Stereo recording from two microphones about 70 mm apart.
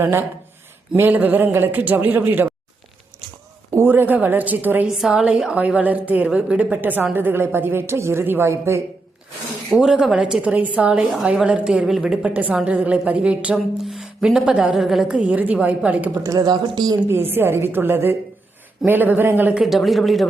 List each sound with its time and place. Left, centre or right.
0.0 s a man's voice: right
3.8 s a man's voice: right
4.9 s a woman's voice: centre; by 8.8 s right
9.7 s a woman's voice: centre
12.2 s a man's voice: right
13.8 s speech: centre
15.0 s a man's voice: centre
16.2 s a woman's voice: right
17.1 s a man's voice: right
19.5 s speech: centre